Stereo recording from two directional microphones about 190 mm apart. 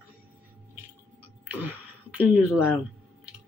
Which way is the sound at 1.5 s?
10° right (ahead or behind).